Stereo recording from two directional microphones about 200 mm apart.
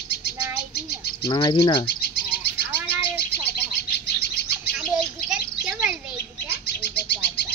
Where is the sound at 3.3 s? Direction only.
55° left (ahead or behind).